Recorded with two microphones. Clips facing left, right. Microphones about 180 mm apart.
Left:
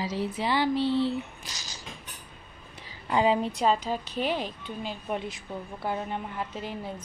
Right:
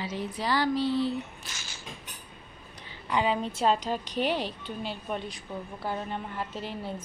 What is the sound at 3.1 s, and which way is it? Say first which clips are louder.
Speech: left 3 dB; 30° left (ahead or behind).